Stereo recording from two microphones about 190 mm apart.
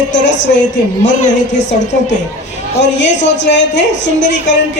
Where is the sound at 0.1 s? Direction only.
70° left (ahead or behind).